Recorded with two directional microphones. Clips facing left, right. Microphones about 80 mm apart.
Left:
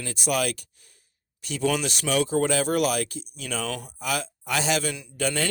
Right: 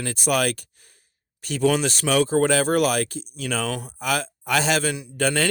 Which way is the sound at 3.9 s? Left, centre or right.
Right.